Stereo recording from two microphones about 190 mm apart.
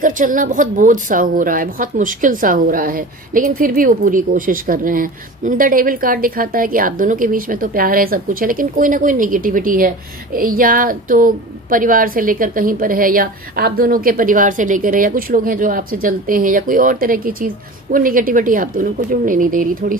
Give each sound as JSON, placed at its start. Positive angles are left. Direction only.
{"t": 0.0, "sound": "a woman's voice", "side_deg": -45}